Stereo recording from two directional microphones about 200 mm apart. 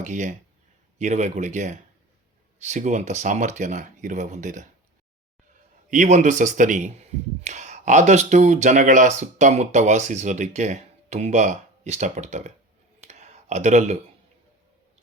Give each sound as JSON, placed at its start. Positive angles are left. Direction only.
{"t": 0.0, "sound": "speech", "side_deg": -40}
{"t": 5.9, "sound": "speech", "side_deg": -35}
{"t": 13.1, "sound": "a sound", "side_deg": -35}